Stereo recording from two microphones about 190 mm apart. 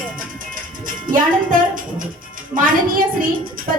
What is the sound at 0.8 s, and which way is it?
Music, 45° right (ahead or behind).